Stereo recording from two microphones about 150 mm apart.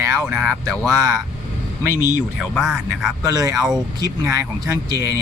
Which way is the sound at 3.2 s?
25° right (ahead or behind).